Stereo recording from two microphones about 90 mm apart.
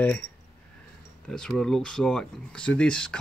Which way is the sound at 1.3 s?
5° left (ahead or behind).